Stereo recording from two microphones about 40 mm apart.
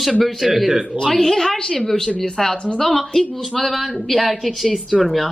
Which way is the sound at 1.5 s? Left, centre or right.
Left.